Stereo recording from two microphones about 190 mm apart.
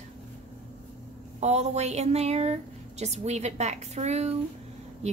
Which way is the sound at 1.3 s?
35° right (ahead or behind).